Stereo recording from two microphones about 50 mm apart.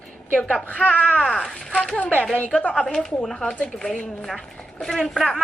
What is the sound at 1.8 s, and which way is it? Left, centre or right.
Speech, left.